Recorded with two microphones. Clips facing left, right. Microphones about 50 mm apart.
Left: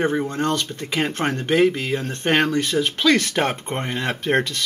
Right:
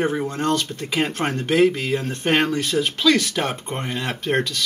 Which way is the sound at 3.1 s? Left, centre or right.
Left.